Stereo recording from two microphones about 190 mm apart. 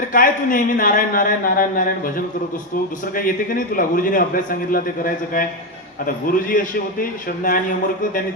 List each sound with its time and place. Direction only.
0.1 s a man's voice: 45° left (ahead or behind)